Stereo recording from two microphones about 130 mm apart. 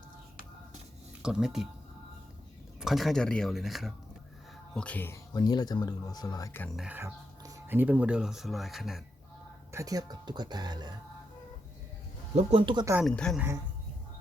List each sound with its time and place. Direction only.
1.2 s speech: 5° right (ahead or behind)
2.8 s speech: centre (ahead or behind)
4.7 s speech: 10° left (ahead or behind)
5.3 s speech: 30° left (ahead or behind)
6.7 s speech: 10° right (ahead or behind)
9.7 s speech: 30° right (ahead or behind)
12.4 s speech: 50° right (ahead or behind)
13.1 s speech: 5° left (ahead or behind)